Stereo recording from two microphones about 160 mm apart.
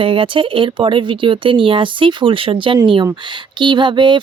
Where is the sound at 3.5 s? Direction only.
30° right (ahead or behind).